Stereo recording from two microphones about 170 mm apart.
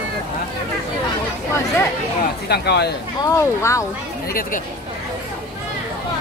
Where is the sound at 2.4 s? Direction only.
75° left (ahead or behind).